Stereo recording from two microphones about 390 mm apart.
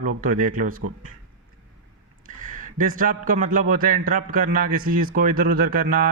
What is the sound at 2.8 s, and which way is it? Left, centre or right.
A man's voice, right.